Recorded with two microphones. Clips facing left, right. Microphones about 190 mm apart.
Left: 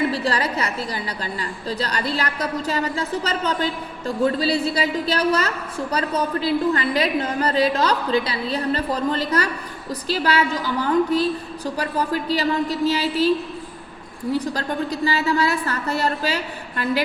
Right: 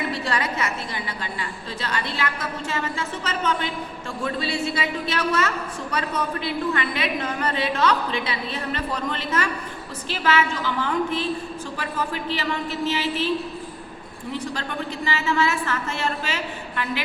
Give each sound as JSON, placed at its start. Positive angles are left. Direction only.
{"t": 0.1, "sound": "a woman's voice", "side_deg": 35}
{"t": 14.3, "sound": "a woman's voice", "side_deg": 40}